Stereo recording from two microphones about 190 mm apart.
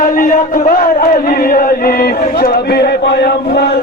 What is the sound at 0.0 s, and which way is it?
Chant, 45° left (ahead or behind).